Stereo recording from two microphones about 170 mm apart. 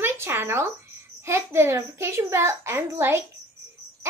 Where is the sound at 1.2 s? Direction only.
15° right (ahead or behind).